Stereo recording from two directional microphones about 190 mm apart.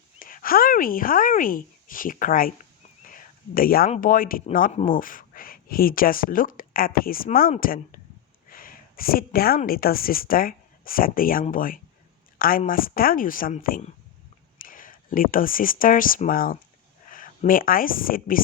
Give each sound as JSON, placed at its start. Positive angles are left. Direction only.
{"t": 0.2, "sound": "speech", "side_deg": 45}
{"t": 3.1, "sound": "a sound", "side_deg": 45}
{"t": 3.8, "sound": "a woman's voice", "side_deg": 40}